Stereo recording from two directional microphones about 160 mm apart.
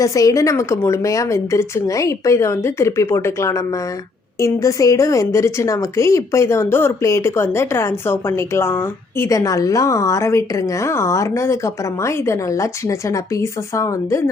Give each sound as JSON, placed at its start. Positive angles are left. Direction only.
{"t": 0.0, "sound": "a woman's voice", "side_deg": 20}